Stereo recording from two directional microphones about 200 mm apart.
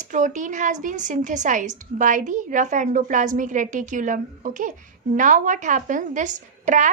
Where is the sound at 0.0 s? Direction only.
40° right (ahead or behind).